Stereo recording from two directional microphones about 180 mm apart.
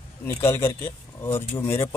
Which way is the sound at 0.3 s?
15° left (ahead or behind).